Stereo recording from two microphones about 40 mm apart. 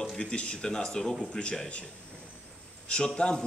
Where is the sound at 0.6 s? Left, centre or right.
Centre.